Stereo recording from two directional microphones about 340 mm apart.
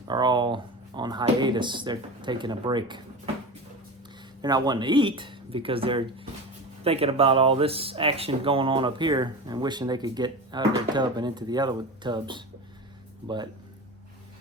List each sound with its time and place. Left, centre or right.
0.1 s speech: centre
4.4 s speech: centre